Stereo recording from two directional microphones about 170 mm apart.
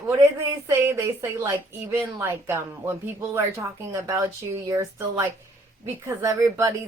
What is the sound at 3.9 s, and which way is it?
A woman's voice, 15° right (ahead or behind).